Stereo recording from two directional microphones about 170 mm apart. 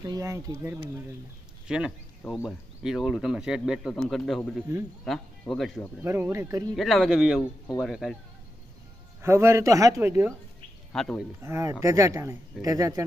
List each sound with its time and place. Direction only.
0.1 s speech: 20° right (ahead or behind); by 5.9 s centre (ahead or behind)
6.0 s speech: 15° right (ahead or behind)
6.7 s speech: centre (ahead or behind)
9.2 s speech: 15° right (ahead or behind)
10.9 s speech: 5° left (ahead or behind)
11.4 s speech: 15° right (ahead or behind)